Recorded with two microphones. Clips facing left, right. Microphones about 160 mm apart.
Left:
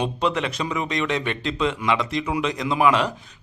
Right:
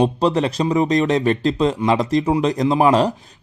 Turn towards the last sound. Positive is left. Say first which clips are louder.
# right 5 dB
turn(degrees=-40)  # may be behind; listen again after turning